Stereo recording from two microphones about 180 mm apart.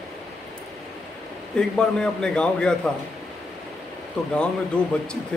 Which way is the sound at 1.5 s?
5° left (ahead or behind).